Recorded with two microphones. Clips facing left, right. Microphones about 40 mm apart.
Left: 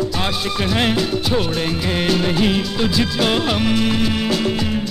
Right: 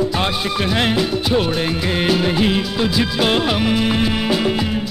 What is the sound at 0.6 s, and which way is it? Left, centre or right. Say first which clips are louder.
Music of bollywood: even; centre.